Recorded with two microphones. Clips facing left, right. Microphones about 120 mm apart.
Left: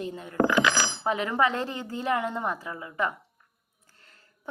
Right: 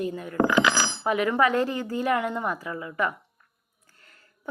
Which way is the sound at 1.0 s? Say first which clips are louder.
Right 3 dB; 30° left (ahead or behind).